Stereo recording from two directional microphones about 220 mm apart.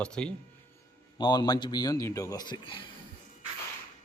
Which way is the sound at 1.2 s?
20° left (ahead or behind).